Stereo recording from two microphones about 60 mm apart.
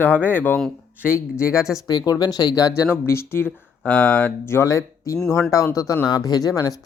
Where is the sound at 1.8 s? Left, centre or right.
Left.